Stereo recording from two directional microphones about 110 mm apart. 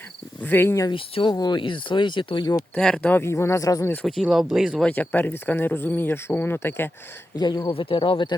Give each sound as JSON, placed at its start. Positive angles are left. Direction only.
{"t": 0.4, "sound": "speech", "side_deg": 20}
{"t": 0.9, "sound": "speech", "side_deg": 50}
{"t": 2.7, "sound": "speech", "side_deg": 10}
{"t": 4.0, "sound": "speech", "side_deg": 0}
{"t": 4.9, "sound": "speech", "side_deg": 15}
{"t": 7.3, "sound": "speech", "side_deg": 40}
{"t": 7.7, "sound": "speech", "side_deg": 55}